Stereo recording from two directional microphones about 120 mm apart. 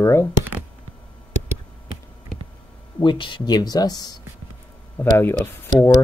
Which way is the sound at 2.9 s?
40° left (ahead or behind).